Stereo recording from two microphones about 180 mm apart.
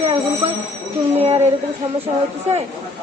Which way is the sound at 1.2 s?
35° right (ahead or behind).